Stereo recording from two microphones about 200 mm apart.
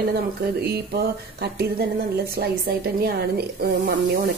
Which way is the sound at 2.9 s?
50° right (ahead or behind).